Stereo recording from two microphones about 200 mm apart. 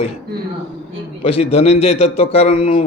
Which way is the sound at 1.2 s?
30° left (ahead or behind).